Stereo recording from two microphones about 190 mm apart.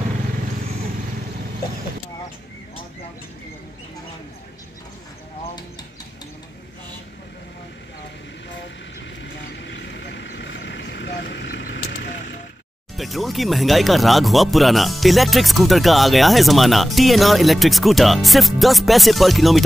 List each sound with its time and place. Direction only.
9.2 s vehicle: 70° left (ahead or behind)
12.9 s speech: centre (ahead or behind)